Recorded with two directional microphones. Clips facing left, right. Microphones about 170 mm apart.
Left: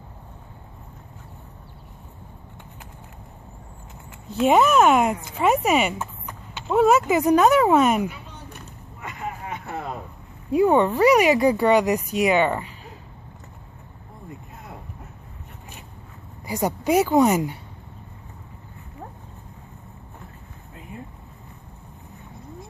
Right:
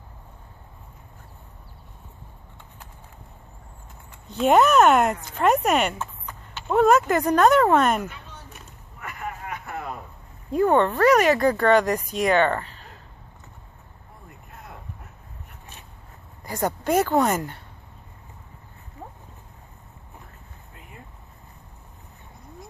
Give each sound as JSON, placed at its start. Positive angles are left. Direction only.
{"t": 4.3, "sound": "speech", "side_deg": 0}
{"t": 9.0, "sound": "vehicle", "side_deg": 25}
{"t": 10.5, "sound": "speech", "side_deg": 10}
{"t": 16.4, "sound": "speech", "side_deg": 10}